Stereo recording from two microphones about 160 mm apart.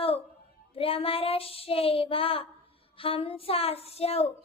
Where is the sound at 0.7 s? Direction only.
35° left (ahead or behind).